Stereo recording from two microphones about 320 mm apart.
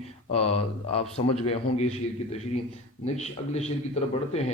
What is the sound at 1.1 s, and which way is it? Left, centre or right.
A man's voice, centre.